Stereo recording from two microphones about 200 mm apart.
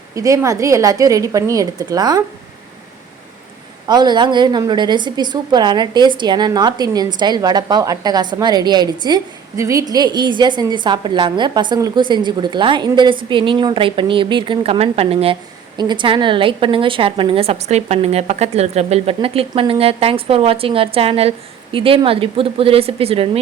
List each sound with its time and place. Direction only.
0.1 s a woman's voice: 15° right (ahead or behind)
3.8 s a woman's voice: 20° right (ahead or behind)